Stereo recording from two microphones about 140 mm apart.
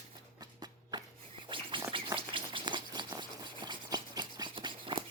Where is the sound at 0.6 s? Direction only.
30° right (ahead or behind).